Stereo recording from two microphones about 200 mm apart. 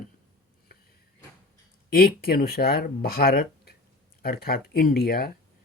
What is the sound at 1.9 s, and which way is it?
Speech, 45° left (ahead or behind).